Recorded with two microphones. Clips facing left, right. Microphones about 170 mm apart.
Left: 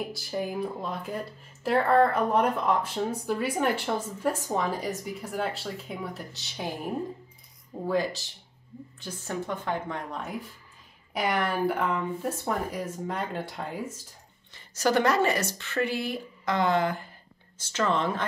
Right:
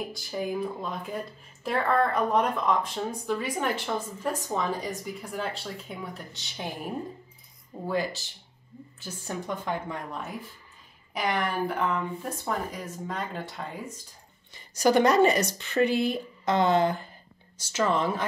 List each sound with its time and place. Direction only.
0.1 s speech: centre (ahead or behind)
7.8 s speech: centre (ahead or behind)
9.3 s speech: 15° right (ahead or behind)
11.1 s speech: 5° left (ahead or behind)
14.5 s a woman's voice: 15° right (ahead or behind)
17.6 s speech: 10° right (ahead or behind)